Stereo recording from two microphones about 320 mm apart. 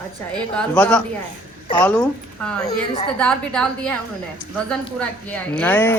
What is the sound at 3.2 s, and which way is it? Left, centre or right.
Speech, centre.